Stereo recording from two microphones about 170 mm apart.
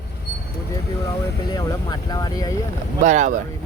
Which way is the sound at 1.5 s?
25° left (ahead or behind).